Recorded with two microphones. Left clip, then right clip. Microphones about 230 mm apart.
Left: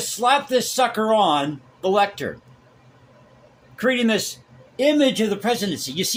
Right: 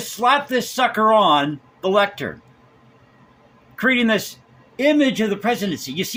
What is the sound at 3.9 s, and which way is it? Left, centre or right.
A man's voice, centre.